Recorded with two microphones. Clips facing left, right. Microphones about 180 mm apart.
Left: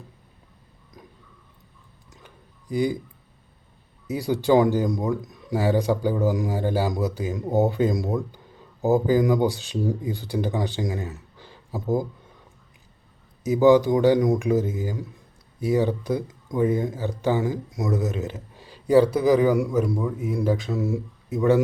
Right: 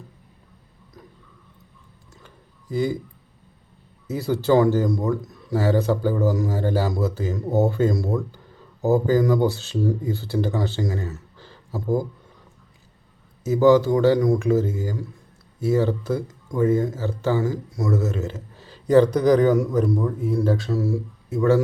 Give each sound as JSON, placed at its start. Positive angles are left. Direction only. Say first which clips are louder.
{"t": 2.2, "sound": "a sound", "louder": "right 1 dB", "side_deg": 15}
{"t": 4.0, "sound": "a man's voice", "louder": "right 1 dB", "side_deg": 15}
{"t": 13.4, "sound": "a man's voice", "louder": "right 1 dB", "side_deg": 15}